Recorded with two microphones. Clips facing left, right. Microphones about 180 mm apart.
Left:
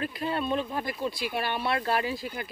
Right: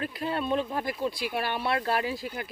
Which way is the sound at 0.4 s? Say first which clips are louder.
Right 2 dB; 10° right (ahead or behind).